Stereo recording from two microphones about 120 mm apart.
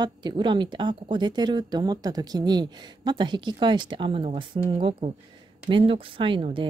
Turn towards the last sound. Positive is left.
turn(degrees=-45)  # may be behind; listen again after turning